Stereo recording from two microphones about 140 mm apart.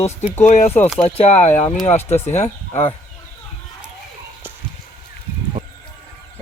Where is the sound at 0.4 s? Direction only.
60° left (ahead or behind).